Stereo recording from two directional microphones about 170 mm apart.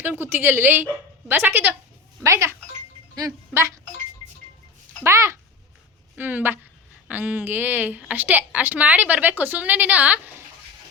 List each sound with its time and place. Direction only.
0.0 s a woman's voice: 10° right (ahead or behind)
5.0 s a woman's voice: 15° right (ahead or behind)